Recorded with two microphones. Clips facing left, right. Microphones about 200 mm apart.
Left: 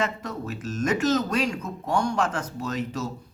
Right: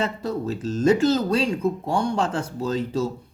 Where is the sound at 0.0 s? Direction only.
30° right (ahead or behind).